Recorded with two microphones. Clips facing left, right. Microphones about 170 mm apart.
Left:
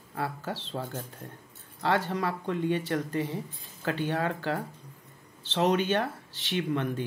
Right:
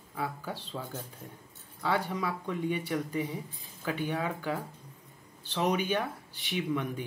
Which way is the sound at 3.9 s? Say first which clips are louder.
Left 3 dB; 80° left.